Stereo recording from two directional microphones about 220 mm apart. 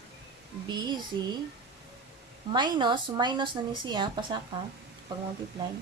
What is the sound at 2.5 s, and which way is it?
Speech, 20° right (ahead or behind).